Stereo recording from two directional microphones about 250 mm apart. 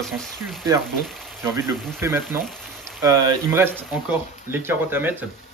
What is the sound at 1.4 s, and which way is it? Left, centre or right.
Speech, centre.